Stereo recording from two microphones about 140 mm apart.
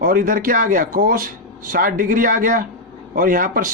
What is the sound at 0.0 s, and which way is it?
Speech, 85° right.